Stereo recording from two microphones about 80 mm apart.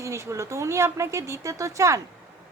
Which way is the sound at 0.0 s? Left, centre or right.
Right.